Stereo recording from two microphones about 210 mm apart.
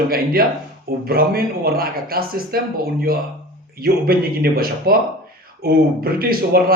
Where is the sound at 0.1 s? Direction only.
45° right (ahead or behind).